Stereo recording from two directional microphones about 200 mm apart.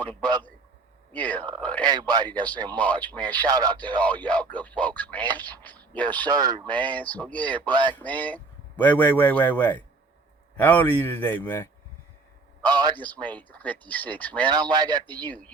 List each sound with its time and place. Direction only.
1.1 s speech: 5° left (ahead or behind)
1.8 s speech: 20° right (ahead or behind)
2.7 s speech: 5° left (ahead or behind)
3.4 s speech: 20° right (ahead or behind)
4.0 s speech: 5° left (ahead or behind)
6.2 s speech: 20° right (ahead or behind)
6.8 s speech: 10° left (ahead or behind)
7.7 s speech: 20° right (ahead or behind)
7.9 s speech: 10° left (ahead or behind)
12.6 s speech: 20° right (ahead or behind)
13.0 s speech: 10° left (ahead or behind)
14.4 s speech: 20° right (ahead or behind)